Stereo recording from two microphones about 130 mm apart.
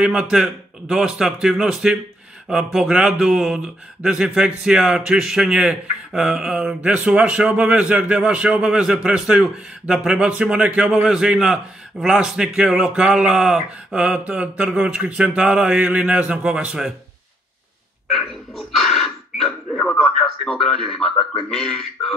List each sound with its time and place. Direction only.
0.0 s speech: 5° right (ahead or behind)
18.1 s a sound: centre (ahead or behind)
20.4 s speech: 5° left (ahead or behind)